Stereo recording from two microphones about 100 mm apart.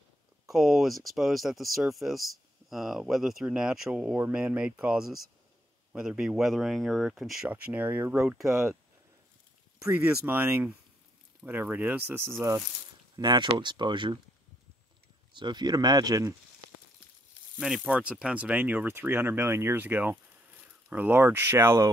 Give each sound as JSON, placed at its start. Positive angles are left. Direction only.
{"t": 0.5, "sound": "speech", "side_deg": -5}
{"t": 7.4, "sound": "speech", "side_deg": -15}
{"t": 8.3, "sound": "speech", "side_deg": -5}
{"t": 10.0, "sound": "speech", "side_deg": -20}
{"t": 13.1, "sound": "speech", "side_deg": -50}
{"t": 15.3, "sound": "speech", "side_deg": -50}
{"t": 17.6, "sound": "speech", "side_deg": -5}